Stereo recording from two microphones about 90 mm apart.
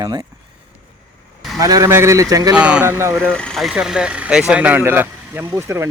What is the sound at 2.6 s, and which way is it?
Speech, 10° right (ahead or behind).